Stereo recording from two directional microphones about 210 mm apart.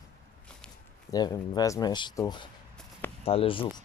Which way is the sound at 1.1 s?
20° left (ahead or behind).